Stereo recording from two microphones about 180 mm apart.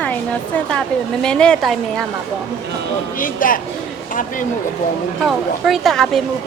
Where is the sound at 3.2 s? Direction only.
50° left (ahead or behind).